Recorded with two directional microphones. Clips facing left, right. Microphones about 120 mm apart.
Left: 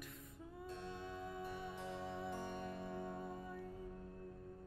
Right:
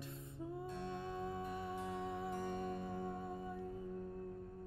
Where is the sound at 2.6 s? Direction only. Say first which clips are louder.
Right 3 dB; 25° right (ahead or behind).